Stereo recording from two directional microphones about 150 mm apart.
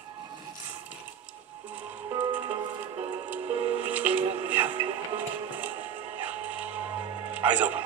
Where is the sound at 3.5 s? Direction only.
40° right (ahead or behind).